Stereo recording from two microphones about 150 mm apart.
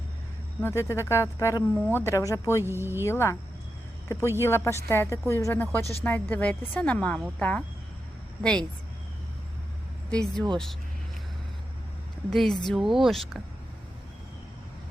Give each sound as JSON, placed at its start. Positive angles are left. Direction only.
{"t": 0.6, "sound": "speech", "side_deg": 20}
{"t": 2.6, "sound": "speech", "side_deg": -15}
{"t": 3.1, "sound": "a woman's voice", "side_deg": 20}
{"t": 4.4, "sound": "a woman's voice", "side_deg": 15}
{"t": 10.1, "sound": "speech", "side_deg": 5}
{"t": 12.3, "sound": "speech", "side_deg": 0}